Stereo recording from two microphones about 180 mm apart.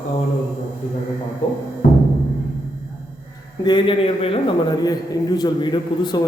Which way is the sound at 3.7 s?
25° left (ahead or behind).